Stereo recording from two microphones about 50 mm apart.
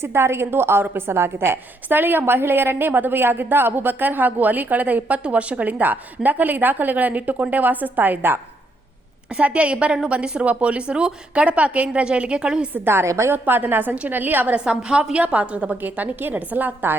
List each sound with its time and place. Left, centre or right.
0.0 s a woman's voice: right
9.3 s a woman's voice: right
12.7 s speech: right
13.1 s a woman's voice: right
13.3 s a woman's voice: right
14.5 s a woman's voice: centre; by 16.9 s right